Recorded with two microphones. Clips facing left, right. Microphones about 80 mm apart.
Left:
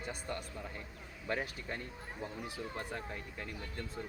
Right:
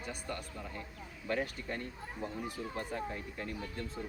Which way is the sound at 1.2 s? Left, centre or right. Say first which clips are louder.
Right 2 dB; centre.